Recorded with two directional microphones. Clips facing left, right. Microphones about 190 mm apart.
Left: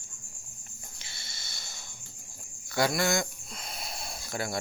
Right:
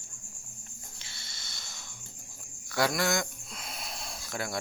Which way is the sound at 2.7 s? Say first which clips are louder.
Left 1 dB; centre (ahead or behind).